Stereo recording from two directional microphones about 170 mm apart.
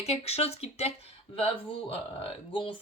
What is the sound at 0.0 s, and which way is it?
Speech, 35° left (ahead or behind).